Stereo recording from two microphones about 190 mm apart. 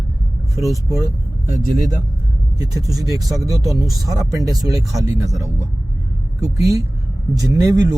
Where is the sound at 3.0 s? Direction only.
20° right (ahead or behind).